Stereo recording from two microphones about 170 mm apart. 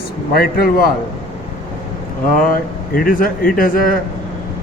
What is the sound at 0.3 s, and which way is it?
Speech, 65° left (ahead or behind).